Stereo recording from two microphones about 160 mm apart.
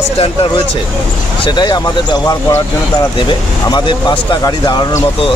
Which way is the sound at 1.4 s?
25° left (ahead or behind).